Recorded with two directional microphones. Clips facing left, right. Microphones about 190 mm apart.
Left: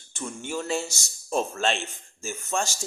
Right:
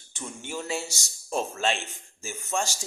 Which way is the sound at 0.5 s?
15° right (ahead or behind).